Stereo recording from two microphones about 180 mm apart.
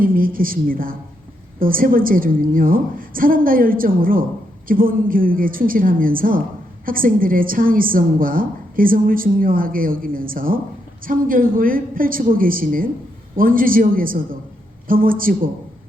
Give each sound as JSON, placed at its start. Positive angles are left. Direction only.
{"t": 0.0, "sound": "a woman's voice", "side_deg": -50}